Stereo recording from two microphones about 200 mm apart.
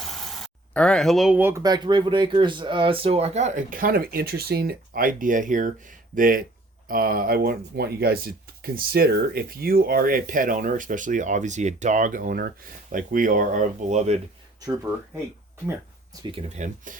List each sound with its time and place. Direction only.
0.0 s speech: centre (ahead or behind); by 14.2 s 35° right (ahead or behind)
16.3 s speech: 40° right (ahead or behind)